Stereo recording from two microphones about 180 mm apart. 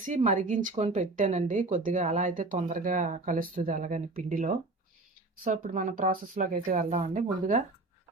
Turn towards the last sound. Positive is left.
turn(degrees=-40)  # may be behind; listen again after turning